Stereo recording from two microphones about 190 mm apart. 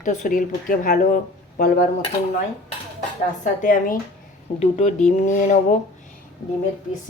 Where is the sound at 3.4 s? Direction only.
45° left (ahead or behind).